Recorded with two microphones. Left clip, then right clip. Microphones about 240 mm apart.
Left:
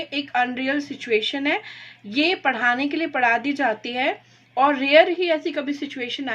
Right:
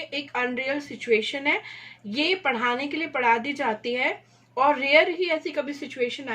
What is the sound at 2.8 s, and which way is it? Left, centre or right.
A woman's voice, left.